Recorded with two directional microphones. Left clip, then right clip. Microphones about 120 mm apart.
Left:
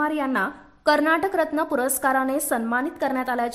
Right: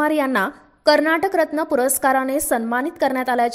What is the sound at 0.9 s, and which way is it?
A woman's voice, 20° right (ahead or behind).